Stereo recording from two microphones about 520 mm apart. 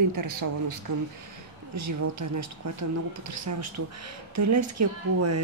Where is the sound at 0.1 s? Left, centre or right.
Right.